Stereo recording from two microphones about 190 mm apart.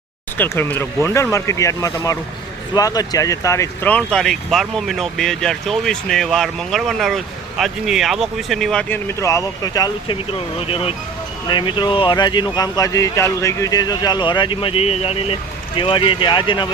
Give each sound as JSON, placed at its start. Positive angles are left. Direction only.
{"t": 0.3, "sound": "speech", "side_deg": 10}
{"t": 10.6, "sound": "speech", "side_deg": 30}